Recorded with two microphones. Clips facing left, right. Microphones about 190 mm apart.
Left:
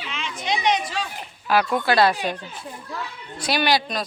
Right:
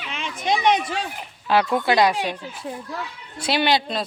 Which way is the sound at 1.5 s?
25° right (ahead or behind).